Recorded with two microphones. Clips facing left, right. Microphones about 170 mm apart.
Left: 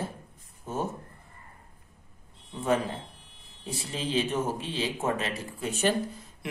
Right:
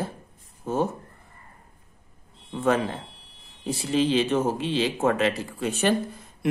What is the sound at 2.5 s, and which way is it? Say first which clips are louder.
Speech: right 4 dB; 80° right.